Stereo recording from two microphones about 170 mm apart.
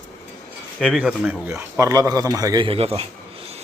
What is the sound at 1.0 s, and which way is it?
A man's voice, 5° right (ahead or behind).